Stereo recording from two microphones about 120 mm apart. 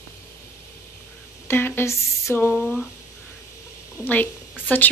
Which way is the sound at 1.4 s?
20° left (ahead or behind).